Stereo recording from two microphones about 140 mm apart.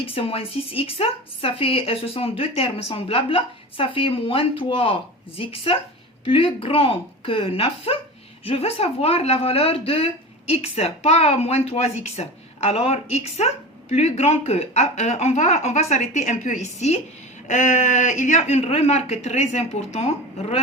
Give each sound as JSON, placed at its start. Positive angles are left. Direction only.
{"t": 0.0, "sound": "speech", "side_deg": 40}